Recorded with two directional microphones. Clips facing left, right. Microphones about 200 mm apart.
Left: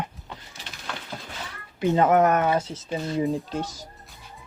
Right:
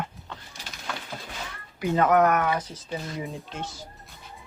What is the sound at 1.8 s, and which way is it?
Speech, 25° left (ahead or behind).